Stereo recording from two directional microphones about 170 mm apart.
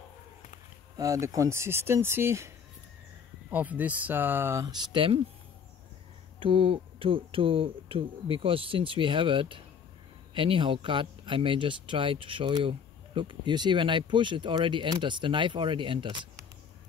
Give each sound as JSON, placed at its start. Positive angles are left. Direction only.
{"t": 0.9, "sound": "speech", "side_deg": -20}
{"t": 4.9, "sound": "speech", "side_deg": -30}
{"t": 6.4, "sound": "speech", "side_deg": -30}